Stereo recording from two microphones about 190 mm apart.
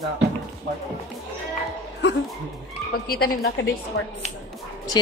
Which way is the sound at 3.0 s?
55° left (ahead or behind).